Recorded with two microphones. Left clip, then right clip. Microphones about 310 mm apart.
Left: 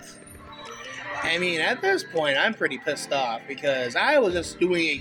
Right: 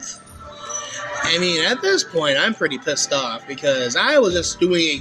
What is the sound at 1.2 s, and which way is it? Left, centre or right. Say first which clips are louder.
Speech: right 5 dB; left.